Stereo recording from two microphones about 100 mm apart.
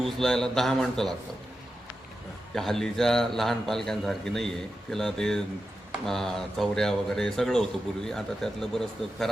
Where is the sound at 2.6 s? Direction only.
5° left (ahead or behind).